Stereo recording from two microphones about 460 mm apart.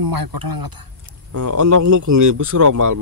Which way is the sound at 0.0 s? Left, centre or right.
Right.